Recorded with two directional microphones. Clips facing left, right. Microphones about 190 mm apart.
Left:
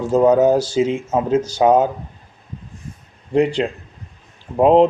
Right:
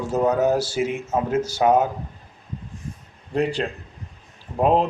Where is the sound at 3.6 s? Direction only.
15° left (ahead or behind).